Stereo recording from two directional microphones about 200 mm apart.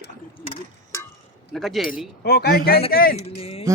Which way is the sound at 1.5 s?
Centre (ahead or behind).